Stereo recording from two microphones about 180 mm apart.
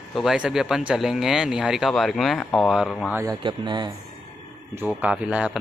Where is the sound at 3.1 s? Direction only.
15° right (ahead or behind).